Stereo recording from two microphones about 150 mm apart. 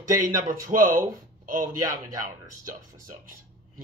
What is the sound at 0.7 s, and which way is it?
Speech, 65° right (ahead or behind).